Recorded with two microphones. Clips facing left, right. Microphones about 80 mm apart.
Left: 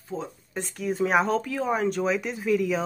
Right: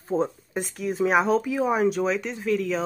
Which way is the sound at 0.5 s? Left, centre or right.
Centre.